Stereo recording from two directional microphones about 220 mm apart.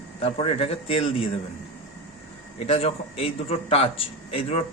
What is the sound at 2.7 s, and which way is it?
A man's voice, 25° left (ahead or behind).